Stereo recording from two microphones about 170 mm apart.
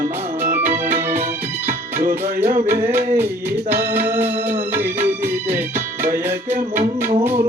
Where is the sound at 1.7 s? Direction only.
55° right (ahead or behind).